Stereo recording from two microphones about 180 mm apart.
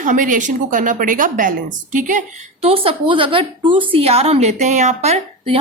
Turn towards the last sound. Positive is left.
turn(degrees=-35)  # may be behind; listen again after turning